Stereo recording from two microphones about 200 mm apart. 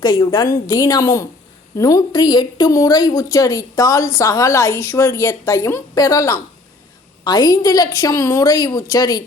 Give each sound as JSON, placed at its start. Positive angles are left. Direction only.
{"t": 0.0, "sound": "a woman's voice", "side_deg": 20}